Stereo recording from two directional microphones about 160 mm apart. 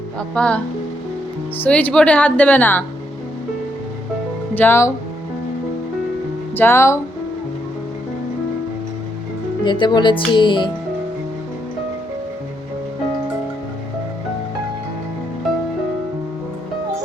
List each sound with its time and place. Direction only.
0.2 s speech: 5° left (ahead or behind)
4.5 s speech: 15° left (ahead or behind)
6.6 s speech: 15° left (ahead or behind)
9.6 s speech: 30° left (ahead or behind)